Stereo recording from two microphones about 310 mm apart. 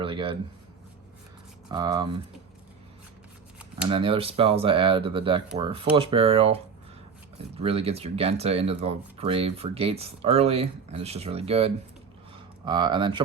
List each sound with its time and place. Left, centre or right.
0.0 s speech: centre
1.7 s speech: centre
3.8 s speech: centre